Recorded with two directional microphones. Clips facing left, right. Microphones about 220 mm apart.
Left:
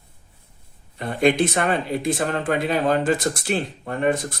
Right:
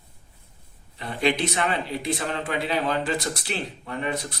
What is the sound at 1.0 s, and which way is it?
Speech, 50° left (ahead or behind).